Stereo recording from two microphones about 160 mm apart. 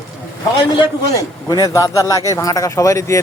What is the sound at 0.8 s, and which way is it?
Speech, 25° left (ahead or behind).